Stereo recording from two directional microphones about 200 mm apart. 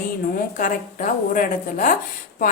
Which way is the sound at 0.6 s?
40° left (ahead or behind).